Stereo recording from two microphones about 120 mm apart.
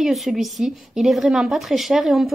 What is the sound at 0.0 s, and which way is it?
A woman's voice, centre (ahead or behind).